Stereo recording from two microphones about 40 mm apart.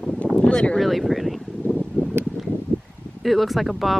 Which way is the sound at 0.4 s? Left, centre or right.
Left.